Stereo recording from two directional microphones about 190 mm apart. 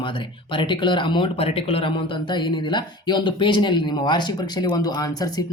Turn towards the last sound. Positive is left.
turn(degrees=20)  # may be behind; listen again after turning